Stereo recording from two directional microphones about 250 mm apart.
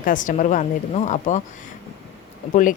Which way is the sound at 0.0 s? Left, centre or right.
Left.